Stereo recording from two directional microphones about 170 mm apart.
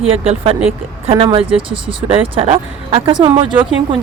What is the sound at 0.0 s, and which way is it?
Speech, 35° right (ahead or behind).